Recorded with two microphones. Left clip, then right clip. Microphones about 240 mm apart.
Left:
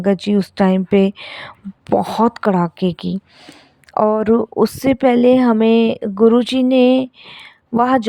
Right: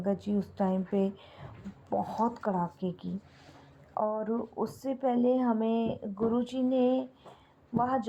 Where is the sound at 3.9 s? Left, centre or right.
Left.